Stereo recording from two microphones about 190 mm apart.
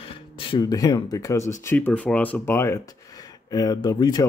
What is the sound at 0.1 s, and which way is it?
Speech, 25° left (ahead or behind).